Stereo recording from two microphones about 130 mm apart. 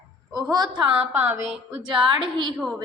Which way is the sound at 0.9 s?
15° right (ahead or behind).